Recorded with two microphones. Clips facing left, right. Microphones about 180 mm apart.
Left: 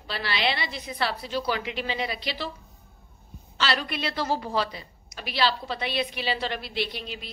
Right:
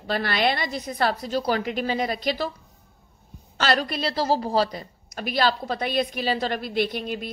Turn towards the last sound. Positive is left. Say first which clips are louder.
# right 6 dB
turn(degrees=-50)  # may be behind; listen again after turning